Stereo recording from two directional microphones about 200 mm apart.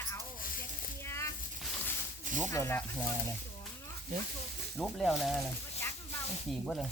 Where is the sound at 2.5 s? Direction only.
10° left (ahead or behind).